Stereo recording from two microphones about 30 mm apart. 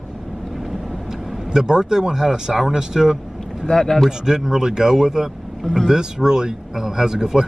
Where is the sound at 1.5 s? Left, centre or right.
Right.